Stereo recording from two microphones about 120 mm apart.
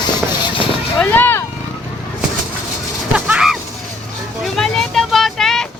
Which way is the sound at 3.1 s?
10° right (ahead or behind).